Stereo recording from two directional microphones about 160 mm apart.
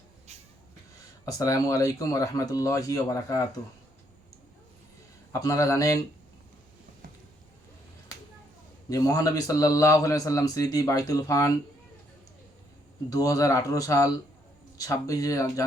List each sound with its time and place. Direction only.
1.2 s a man's voice: 20° left (ahead or behind)
5.3 s a man's voice: 20° left (ahead or behind)
8.9 s a man's voice: 20° left (ahead or behind)
13.1 s a man's voice: 20° left (ahead or behind)